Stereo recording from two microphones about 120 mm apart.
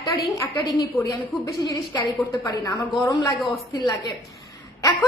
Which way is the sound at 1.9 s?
35° left (ahead or behind).